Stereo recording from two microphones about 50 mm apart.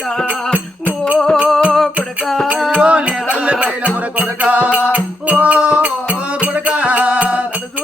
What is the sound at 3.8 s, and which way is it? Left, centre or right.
Music, right.